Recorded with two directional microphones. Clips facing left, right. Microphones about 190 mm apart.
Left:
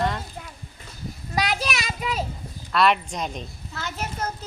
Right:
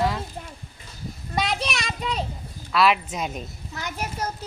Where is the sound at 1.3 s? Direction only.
Centre (ahead or behind).